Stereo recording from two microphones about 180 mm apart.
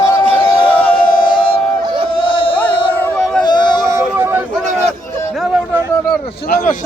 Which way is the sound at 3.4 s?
25° left (ahead or behind).